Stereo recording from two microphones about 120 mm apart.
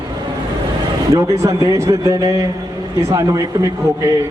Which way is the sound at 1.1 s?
25° right (ahead or behind).